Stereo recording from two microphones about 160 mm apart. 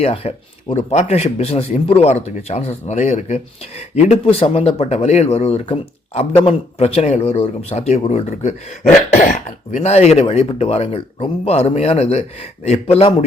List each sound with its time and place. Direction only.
0.0 s speech: 40° left (ahead or behind)
9.0 s throat clearing: 50° left (ahead or behind)
9.7 s speech: 40° left (ahead or behind)